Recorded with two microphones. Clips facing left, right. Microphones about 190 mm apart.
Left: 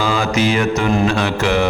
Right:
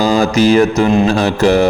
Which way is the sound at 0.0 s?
40° right (ahead or behind).